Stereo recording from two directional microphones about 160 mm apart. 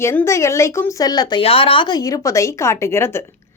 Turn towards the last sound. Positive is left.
turn(degrees=15)  # may be behind; listen again after turning